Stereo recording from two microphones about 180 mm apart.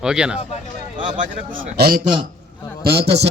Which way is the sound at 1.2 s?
50° right (ahead or behind).